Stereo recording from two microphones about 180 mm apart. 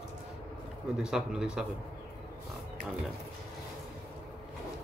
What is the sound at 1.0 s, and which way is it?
Speech, 5° right (ahead or behind).